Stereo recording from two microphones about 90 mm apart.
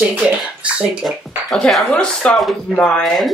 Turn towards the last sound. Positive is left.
turn(degrees=10)  # may be behind; listen again after turning